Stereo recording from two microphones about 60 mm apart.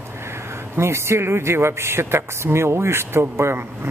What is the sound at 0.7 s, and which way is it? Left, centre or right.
Speech, right.